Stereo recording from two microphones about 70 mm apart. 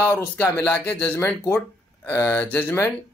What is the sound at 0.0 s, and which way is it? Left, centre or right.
Speech, left.